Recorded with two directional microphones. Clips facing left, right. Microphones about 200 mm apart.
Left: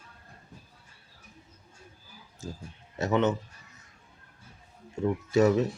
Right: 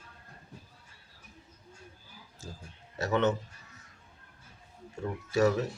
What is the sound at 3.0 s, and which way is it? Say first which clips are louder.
Speech: left 3 dB; 15° left (ahead or behind).